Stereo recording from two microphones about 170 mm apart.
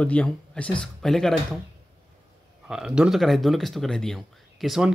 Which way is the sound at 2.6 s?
5° right (ahead or behind).